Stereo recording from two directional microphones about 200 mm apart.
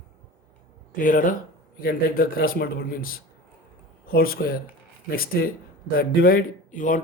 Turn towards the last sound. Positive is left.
turn(degrees=40)  # may be behind; listen again after turning